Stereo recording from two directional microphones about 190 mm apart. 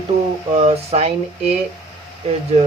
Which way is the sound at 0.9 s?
30° right (ahead or behind).